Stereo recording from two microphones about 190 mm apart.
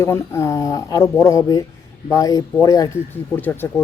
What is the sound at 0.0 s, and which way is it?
Speech, 15° left (ahead or behind).